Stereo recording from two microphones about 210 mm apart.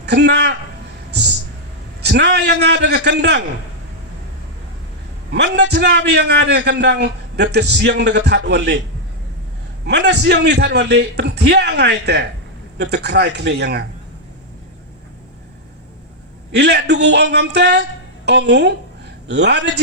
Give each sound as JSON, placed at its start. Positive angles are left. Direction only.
{"t": 0.0, "sound": "speech", "side_deg": -55}
{"t": 2.0, "sound": "a man's voice", "side_deg": -55}
{"t": 5.3, "sound": "a man's voice", "side_deg": -55}
{"t": 9.8, "sound": "a man's voice", "side_deg": -55}
{"t": 16.6, "sound": "a man's voice", "side_deg": -55}